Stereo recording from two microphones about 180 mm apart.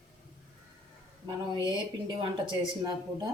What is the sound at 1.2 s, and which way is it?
Speech, 25° right (ahead or behind).